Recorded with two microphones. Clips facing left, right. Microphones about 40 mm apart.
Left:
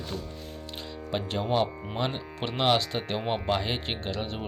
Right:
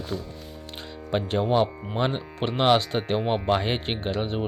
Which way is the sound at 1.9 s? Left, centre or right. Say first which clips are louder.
Right 5 dB; right.